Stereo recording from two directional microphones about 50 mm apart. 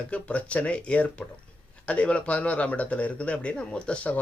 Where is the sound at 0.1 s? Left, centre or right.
Left.